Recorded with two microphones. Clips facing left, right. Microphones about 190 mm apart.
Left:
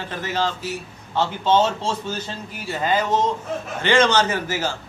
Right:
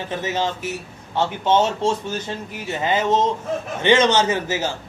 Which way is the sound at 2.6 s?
20° right (ahead or behind).